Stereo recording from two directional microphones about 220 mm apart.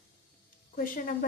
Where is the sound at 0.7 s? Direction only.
40° left (ahead or behind).